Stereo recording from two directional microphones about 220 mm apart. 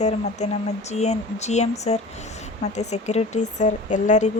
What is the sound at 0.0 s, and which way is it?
Speech, 30° left (ahead or behind).